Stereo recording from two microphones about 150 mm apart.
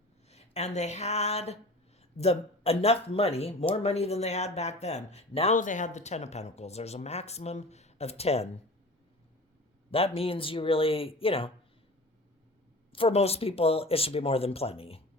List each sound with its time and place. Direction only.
0.3 s speech: 45° left (ahead or behind)
9.9 s speech: 40° left (ahead or behind)
12.9 s speech: 40° left (ahead or behind)